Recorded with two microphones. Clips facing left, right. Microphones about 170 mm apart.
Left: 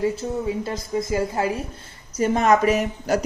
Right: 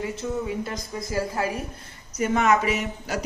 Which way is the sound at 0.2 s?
35° left (ahead or behind).